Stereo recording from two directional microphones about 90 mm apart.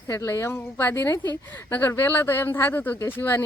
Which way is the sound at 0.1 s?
30° left (ahead or behind).